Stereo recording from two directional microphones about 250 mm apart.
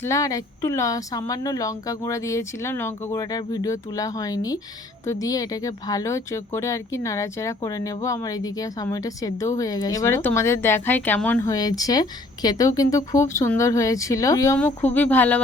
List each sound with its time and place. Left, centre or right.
0.0 s speech: centre